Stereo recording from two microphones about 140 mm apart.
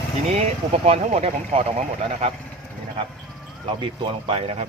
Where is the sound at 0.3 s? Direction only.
50° right (ahead or behind).